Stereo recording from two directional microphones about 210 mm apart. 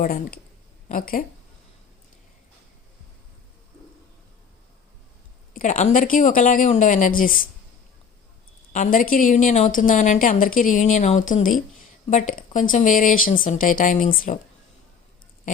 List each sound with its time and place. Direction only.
0.0 s a woman's voice: 45° left (ahead or behind)
5.5 s a woman's voice: 35° left (ahead or behind)
8.7 s a woman's voice: 40° left (ahead or behind)